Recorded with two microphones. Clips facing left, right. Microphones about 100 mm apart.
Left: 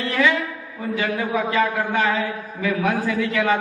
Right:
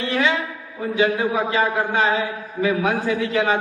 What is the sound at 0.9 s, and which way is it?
A man's voice, 25° right (ahead or behind).